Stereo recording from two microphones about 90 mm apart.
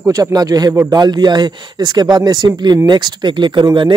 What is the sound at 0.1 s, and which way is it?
Speech, 45° right (ahead or behind).